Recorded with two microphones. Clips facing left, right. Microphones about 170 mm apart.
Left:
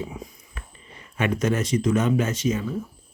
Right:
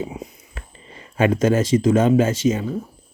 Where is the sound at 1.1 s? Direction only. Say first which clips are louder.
Right 6 dB; 30° right (ahead or behind).